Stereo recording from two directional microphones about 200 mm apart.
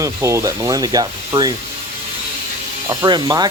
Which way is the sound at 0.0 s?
15° right (ahead or behind).